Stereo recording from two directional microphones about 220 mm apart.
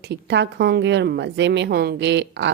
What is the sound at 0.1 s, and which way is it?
A woman's voice, 50° right (ahead or behind).